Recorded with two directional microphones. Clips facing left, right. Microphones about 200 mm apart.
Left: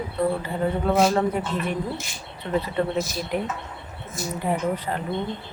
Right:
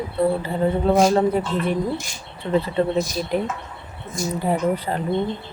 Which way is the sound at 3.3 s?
30° right (ahead or behind).